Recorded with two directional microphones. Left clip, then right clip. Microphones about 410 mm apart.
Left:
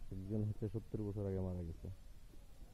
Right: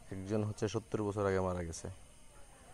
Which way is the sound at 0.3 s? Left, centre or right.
Centre.